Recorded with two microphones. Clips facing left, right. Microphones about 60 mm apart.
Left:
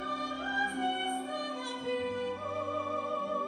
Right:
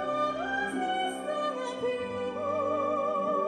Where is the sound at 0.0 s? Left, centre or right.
Right.